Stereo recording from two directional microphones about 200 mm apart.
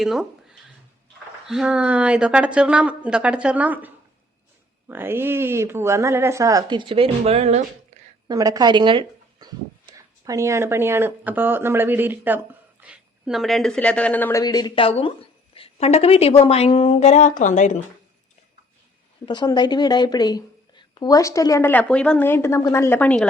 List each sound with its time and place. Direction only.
0.0 s a woman's voice: centre (ahead or behind); by 7.6 s 30° right (ahead or behind)
8.3 s a woman's voice: 20° right (ahead or behind); by 17.7 s 40° left (ahead or behind)
19.2 s speech: 20° left (ahead or behind)